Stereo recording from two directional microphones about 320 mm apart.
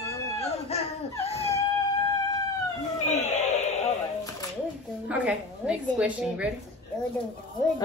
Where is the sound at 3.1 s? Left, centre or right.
Left.